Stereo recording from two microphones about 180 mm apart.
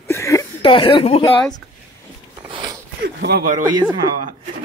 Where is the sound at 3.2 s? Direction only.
60° right (ahead or behind).